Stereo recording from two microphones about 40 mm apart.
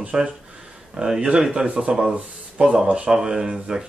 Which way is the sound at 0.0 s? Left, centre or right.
Right.